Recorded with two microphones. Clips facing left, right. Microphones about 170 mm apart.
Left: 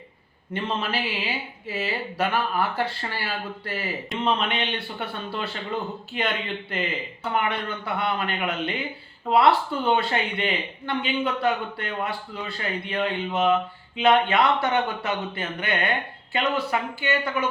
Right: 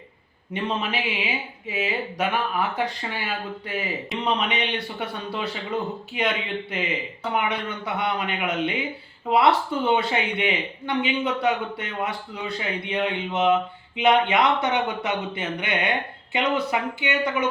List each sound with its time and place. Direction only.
0.5 s a man's voice: centre (ahead or behind)
12.8 s a man's voice: 20° right (ahead or behind)